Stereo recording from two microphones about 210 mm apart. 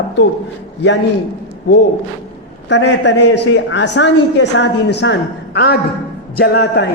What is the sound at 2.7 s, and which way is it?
A woman's voice, 55° left (ahead or behind).